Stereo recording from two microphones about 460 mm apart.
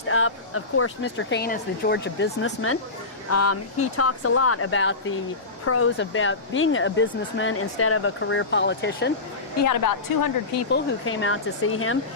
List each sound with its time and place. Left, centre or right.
0.1 s a woman's voice: left
9.6 s a woman's voice: left
11.0 s speech: left